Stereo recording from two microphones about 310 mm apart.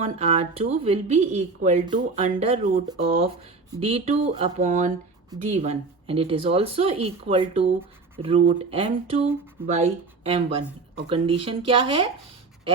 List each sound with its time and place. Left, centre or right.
0.0 s speech: centre